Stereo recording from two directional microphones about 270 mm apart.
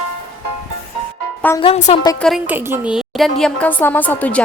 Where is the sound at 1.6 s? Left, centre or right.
Left.